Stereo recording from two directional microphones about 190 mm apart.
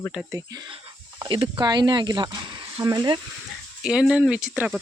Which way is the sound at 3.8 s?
5° right (ahead or behind).